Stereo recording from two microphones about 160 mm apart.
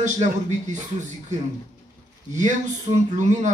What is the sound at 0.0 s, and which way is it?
Speech, 50° right (ahead or behind).